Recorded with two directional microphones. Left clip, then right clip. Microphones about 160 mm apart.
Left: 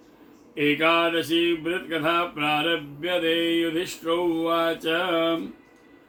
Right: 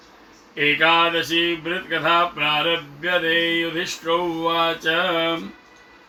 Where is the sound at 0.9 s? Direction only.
25° left (ahead or behind).